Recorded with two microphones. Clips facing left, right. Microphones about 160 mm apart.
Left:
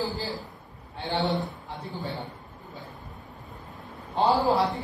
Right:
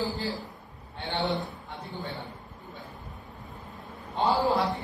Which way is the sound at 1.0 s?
Centre (ahead or behind).